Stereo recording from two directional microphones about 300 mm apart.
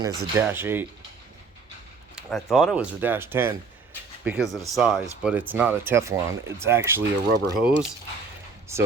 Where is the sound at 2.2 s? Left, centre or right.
Centre.